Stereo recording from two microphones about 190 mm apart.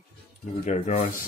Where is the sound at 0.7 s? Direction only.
35° left (ahead or behind).